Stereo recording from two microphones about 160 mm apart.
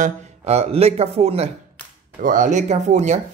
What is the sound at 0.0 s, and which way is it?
Speech, 40° right (ahead or behind).